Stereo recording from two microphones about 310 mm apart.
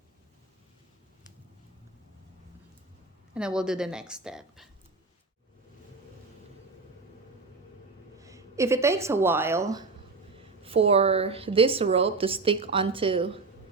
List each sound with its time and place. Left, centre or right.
3.3 s a woman's voice: centre
8.2 s a woman's voice: centre